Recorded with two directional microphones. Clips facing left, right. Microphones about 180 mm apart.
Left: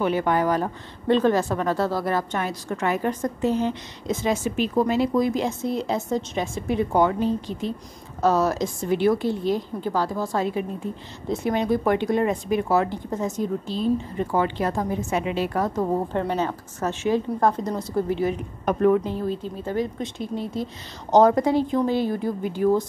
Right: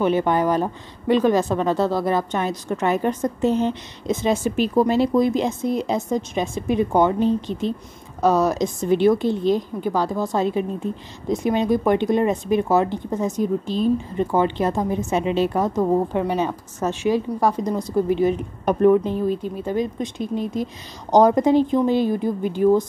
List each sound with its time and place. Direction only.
0.0 s speech: 20° right (ahead or behind)
4.5 s speech: 35° right (ahead or behind); by 22.8 s 20° right (ahead or behind)